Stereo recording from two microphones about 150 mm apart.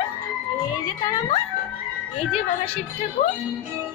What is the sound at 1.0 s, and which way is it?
Speech, 25° left (ahead or behind).